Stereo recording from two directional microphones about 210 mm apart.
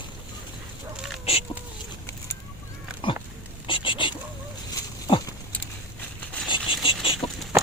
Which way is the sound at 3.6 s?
25° left (ahead or behind).